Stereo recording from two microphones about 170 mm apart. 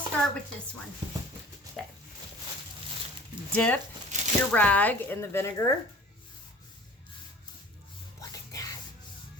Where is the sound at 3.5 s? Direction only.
10° left (ahead or behind).